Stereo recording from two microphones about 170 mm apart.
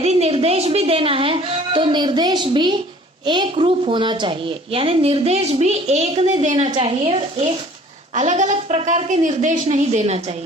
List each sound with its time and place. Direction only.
0.0 s a woman's voice: 40° right (ahead or behind)